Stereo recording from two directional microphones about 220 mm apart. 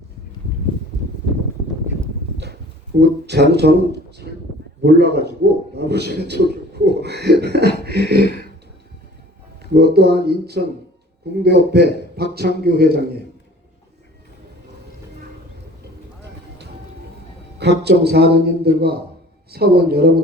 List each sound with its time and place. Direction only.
3.0 s a man's voice: 50° right (ahead or behind)
4.8 s a man's voice: 50° right (ahead or behind)
9.7 s a man's voice: 50° right (ahead or behind)
17.6 s a man's voice: 50° right (ahead or behind)